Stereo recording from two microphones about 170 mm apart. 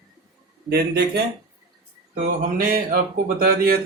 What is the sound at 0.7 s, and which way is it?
Speech, 70° right (ahead or behind).